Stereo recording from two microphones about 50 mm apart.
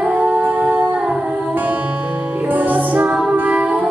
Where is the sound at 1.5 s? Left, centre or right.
Right.